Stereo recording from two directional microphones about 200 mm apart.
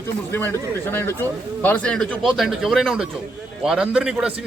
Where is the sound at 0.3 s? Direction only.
10° left (ahead or behind).